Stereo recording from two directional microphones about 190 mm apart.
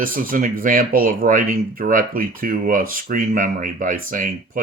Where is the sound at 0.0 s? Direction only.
45° right (ahead or behind).